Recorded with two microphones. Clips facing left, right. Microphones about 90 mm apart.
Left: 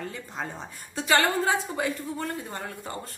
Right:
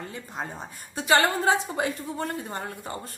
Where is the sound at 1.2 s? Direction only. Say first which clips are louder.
Right 1 dB; 30° right (ahead or behind).